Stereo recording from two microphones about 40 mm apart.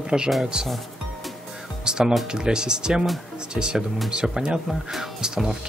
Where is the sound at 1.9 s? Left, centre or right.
Centre.